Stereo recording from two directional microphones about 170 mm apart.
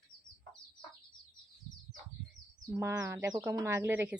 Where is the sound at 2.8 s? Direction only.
15° right (ahead or behind).